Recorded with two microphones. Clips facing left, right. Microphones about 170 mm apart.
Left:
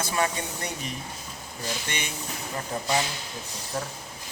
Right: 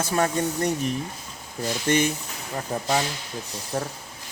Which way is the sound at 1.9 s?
45° right (ahead or behind).